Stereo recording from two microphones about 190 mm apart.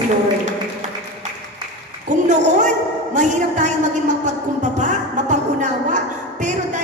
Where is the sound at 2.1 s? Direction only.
40° right (ahead or behind).